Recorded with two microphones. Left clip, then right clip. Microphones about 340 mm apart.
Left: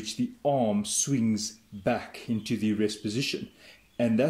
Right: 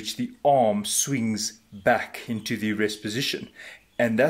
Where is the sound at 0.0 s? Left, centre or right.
Right.